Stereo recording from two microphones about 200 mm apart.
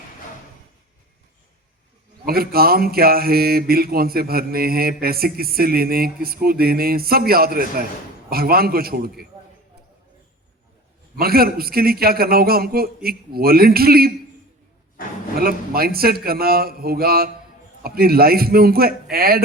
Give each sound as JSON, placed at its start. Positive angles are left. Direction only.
{"t": 2.2, "sound": "speech", "side_deg": -50}
{"t": 11.2, "sound": "speech", "side_deg": -50}
{"t": 15.4, "sound": "speech", "side_deg": -50}